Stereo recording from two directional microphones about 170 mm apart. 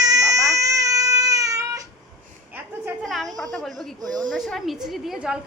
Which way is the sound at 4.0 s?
25° right (ahead or behind).